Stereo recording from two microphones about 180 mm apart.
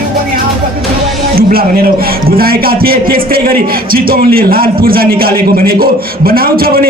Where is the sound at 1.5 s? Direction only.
55° right (ahead or behind).